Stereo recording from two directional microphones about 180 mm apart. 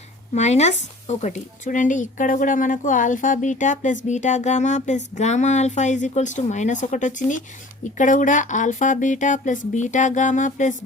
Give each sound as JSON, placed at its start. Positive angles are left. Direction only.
{"t": 0.3, "sound": "speech", "side_deg": 40}